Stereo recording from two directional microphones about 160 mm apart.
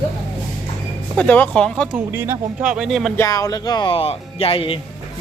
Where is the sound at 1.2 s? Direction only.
10° left (ahead or behind).